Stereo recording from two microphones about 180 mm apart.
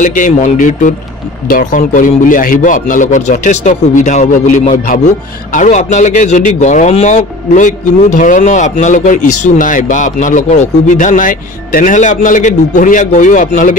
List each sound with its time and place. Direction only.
0.0 s a man's voice: 45° left (ahead or behind)